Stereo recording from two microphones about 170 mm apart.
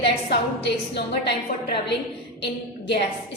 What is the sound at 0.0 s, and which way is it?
A woman's voice, 80° left.